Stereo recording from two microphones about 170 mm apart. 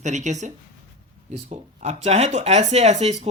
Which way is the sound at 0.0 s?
45° right (ahead or behind).